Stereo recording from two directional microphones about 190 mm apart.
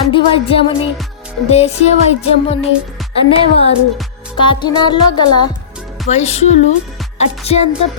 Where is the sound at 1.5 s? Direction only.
35° left (ahead or behind).